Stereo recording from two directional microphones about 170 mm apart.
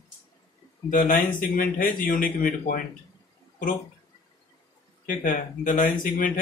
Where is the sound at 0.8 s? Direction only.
55° left (ahead or behind).